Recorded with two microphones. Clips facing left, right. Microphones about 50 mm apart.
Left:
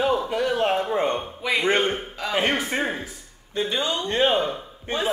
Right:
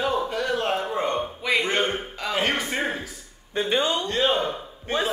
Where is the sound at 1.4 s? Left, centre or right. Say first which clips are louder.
Left 3 dB; centre.